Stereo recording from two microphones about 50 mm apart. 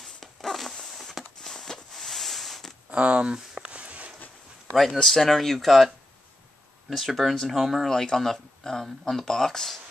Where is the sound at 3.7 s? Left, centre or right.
Right.